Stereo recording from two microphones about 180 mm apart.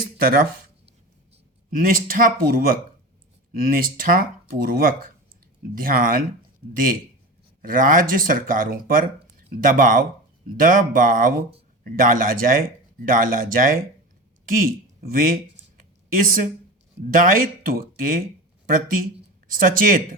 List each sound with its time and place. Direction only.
1.7 s speech: 50° right (ahead or behind)
7.6 s speech: 50° right (ahead or behind)
19.5 s speech: 50° right (ahead or behind)